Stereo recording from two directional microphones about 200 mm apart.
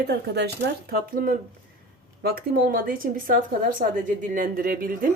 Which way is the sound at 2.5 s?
45° right (ahead or behind).